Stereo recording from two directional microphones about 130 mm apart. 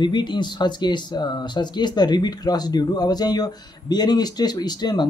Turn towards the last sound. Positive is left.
turn(degrees=35)  # may be behind; listen again after turning